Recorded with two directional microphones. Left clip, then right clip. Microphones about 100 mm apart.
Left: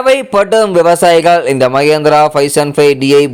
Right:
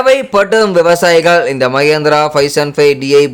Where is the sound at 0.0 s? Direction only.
40° left (ahead or behind).